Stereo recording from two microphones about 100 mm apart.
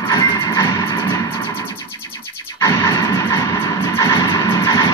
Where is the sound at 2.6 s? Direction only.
35° left (ahead or behind).